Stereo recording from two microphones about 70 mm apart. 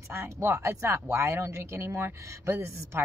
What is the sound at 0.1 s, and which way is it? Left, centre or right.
Speech, right.